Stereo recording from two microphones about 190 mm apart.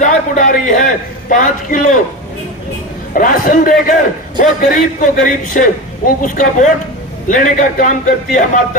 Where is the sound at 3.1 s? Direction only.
45° left (ahead or behind).